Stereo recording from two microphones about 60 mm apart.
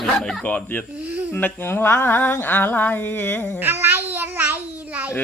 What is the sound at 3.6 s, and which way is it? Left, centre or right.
Speech, right.